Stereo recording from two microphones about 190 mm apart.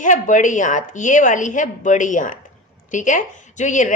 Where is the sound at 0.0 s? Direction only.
40° left (ahead or behind).